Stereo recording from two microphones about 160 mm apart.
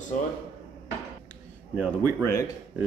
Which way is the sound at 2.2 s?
15° left (ahead or behind).